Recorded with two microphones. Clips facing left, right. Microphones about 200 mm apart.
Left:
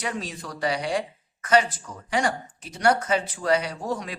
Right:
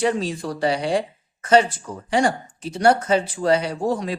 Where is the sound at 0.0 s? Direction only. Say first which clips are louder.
Right 10 dB; 30° right (ahead or behind).